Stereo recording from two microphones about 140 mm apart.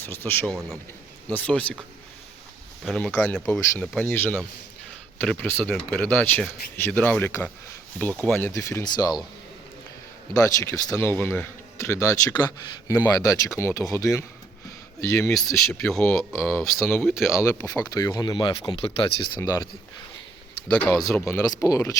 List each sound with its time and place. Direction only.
0.0 s speech: 15° left (ahead or behind)
0.4 s speech: 5° left (ahead or behind)
2.8 s speech: 5° left (ahead or behind); by 9.2 s 30° left (ahead or behind)
10.3 s speech: 25° left (ahead or behind)
15.4 s speech: centre (ahead or behind)
17.3 s speech: 20° left (ahead or behind); by 19.4 s 35° left (ahead or behind)
19.4 s speech: 25° left (ahead or behind)
20.7 s speech: 5° left (ahead or behind)
21.2 s speech: 25° left (ahead or behind)